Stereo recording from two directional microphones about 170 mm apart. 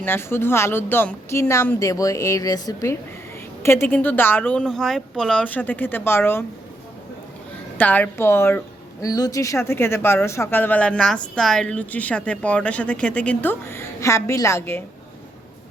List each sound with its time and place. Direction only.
0.0 s speech: 15° left (ahead or behind)
7.8 s speech: 10° left (ahead or behind)